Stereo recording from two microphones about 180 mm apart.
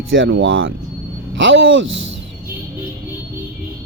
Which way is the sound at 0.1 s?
90° right.